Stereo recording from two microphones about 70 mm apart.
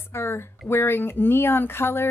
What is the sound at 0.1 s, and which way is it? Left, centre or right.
Speech, left.